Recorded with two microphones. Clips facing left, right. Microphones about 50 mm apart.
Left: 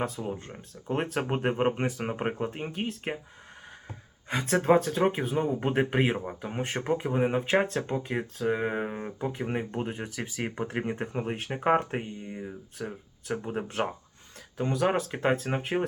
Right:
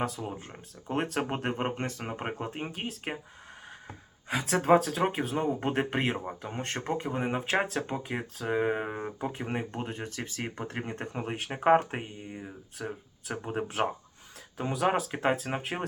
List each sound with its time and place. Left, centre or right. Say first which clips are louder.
0.0 s speech: left 1 dB; centre
4.3 s speech: even; centre